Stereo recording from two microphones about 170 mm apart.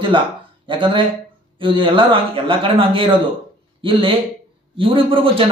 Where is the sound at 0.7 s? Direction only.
30° right (ahead or behind).